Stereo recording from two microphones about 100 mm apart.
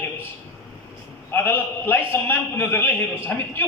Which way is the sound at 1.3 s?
20° left (ahead or behind).